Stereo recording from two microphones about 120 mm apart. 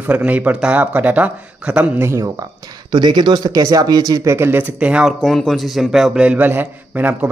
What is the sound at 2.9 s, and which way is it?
Speech, 40° right (ahead or behind).